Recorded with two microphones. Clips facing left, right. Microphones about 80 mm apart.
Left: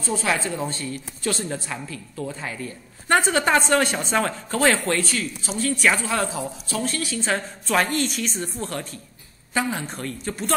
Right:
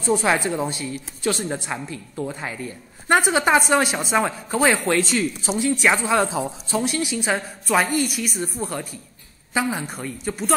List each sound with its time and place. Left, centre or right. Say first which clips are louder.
0.0 s a woman's voice: right 4 dB; centre